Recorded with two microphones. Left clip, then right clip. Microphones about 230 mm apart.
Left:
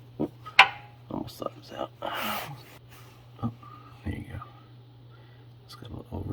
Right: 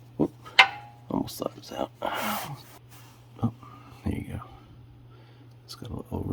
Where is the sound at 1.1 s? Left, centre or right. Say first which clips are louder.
Right 4 dB; right.